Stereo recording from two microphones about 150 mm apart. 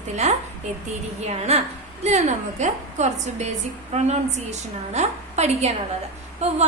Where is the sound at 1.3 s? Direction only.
45° right (ahead or behind).